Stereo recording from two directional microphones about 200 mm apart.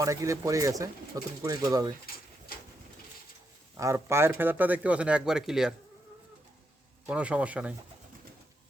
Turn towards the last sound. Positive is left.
turn(degrees=-5)  # may be behind; listen again after turning